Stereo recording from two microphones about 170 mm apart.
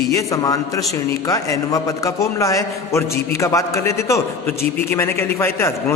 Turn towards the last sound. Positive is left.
turn(degrees=15)  # may be behind; listen again after turning